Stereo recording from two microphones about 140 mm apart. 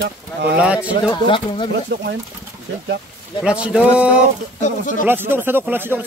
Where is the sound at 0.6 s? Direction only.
10° right (ahead or behind).